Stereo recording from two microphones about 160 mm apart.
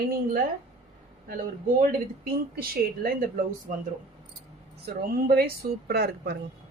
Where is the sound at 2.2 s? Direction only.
65° right (ahead or behind).